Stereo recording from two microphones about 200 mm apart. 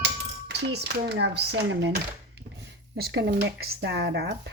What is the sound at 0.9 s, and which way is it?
Speech, 55° right (ahead or behind).